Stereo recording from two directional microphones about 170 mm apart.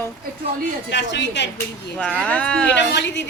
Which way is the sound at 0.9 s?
90° left.